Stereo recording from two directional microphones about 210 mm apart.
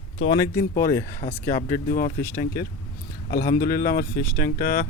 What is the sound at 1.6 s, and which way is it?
Speech, 40° left (ahead or behind).